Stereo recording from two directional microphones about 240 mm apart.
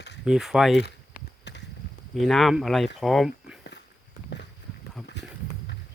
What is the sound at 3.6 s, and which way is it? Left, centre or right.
Walk, left.